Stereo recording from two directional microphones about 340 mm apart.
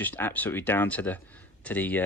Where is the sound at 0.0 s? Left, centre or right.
Centre.